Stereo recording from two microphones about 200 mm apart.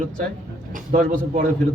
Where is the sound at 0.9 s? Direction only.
45° right (ahead or behind).